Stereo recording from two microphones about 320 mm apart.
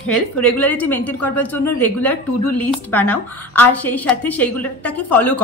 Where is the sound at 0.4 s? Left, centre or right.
Centre.